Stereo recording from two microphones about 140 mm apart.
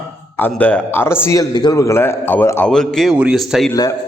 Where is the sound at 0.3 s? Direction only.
10° left (ahead or behind).